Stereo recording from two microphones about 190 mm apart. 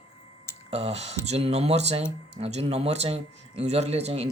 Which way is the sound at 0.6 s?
35° right (ahead or behind).